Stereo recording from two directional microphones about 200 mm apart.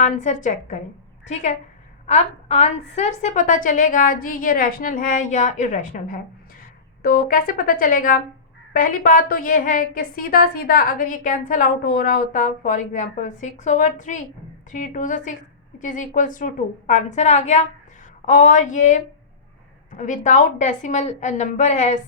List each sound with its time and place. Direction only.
0.0 s a woman's voice: 40° left (ahead or behind)